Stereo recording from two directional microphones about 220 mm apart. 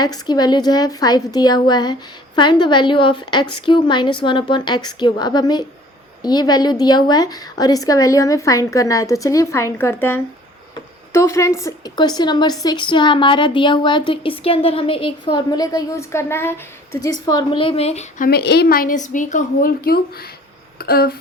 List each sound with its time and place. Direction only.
0.0 s a woman's voice: 20° left (ahead or behind)
18.3 s a woman's voice: 45° left (ahead or behind)
20.7 s a sound: 45° left (ahead or behind)